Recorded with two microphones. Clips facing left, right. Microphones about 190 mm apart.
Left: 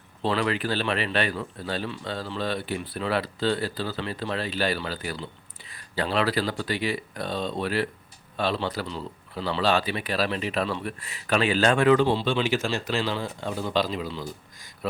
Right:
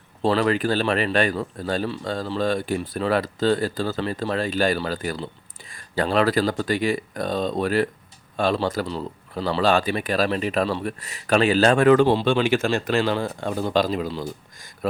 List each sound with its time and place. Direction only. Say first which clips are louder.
0.2 s speech: right 5 dB; 40° right (ahead or behind)